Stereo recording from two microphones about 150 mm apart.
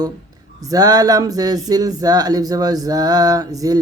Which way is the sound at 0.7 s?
25° right (ahead or behind).